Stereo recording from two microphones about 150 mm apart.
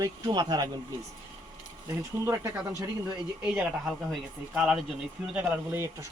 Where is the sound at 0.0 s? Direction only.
25° right (ahead or behind).